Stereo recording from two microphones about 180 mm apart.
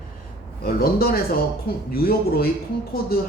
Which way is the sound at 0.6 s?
55° left (ahead or behind).